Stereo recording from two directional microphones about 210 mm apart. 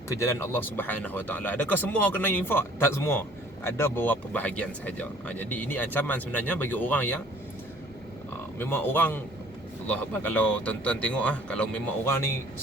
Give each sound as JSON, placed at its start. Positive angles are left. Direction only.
{"t": 0.2, "sound": "speech", "side_deg": 15}
{"t": 8.5, "sound": "speech", "side_deg": 10}